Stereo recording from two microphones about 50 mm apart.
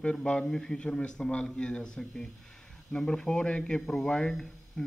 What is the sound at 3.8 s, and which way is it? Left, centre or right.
Speech, centre.